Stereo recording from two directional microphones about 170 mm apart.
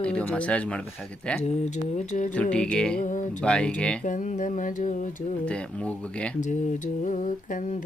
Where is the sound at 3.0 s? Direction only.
50° left (ahead or behind).